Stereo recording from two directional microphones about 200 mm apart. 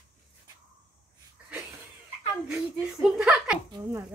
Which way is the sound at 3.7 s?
20° right (ahead or behind).